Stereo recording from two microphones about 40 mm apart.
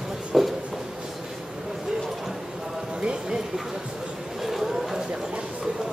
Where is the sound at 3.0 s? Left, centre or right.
Right.